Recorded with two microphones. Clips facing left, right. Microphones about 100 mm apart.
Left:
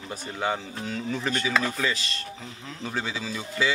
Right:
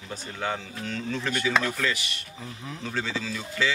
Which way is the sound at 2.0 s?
15° right (ahead or behind).